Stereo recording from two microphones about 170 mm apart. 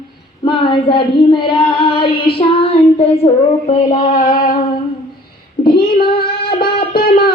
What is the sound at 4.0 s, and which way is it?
Mantra, 50° left (ahead or behind).